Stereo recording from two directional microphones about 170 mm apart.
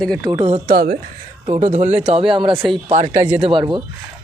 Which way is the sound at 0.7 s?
65° right (ahead or behind).